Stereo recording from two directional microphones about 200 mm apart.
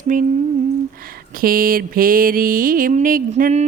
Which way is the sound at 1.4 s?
45° right (ahead or behind).